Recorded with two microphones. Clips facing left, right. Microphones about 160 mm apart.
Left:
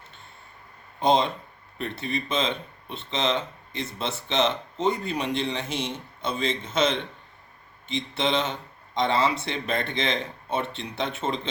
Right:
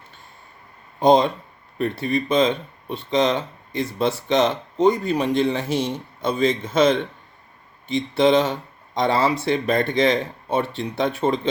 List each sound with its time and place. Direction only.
0.9 s speech: 45° right (ahead or behind)